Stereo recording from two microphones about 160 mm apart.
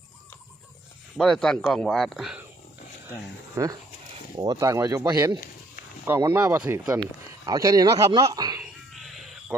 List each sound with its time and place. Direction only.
1.1 s speech: centre (ahead or behind)
3.5 s a man's voice: 20° right (ahead or behind)
8.6 s a sound: centre (ahead or behind)
9.5 s speech: 5° right (ahead or behind)